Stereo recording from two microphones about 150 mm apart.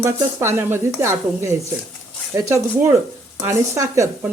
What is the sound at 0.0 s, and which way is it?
Speech, 15° right (ahead or behind).